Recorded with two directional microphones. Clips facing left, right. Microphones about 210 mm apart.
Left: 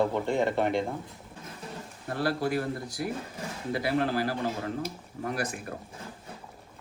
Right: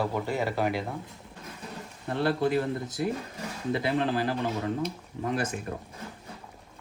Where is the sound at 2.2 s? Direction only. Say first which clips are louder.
Right 3 dB; 25° right (ahead or behind).